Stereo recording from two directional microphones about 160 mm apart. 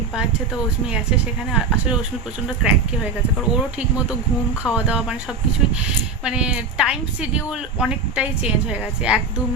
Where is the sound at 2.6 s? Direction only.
5° right (ahead or behind).